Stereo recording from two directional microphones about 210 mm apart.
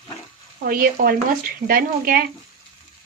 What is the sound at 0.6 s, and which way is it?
Speech, 45° right (ahead or behind).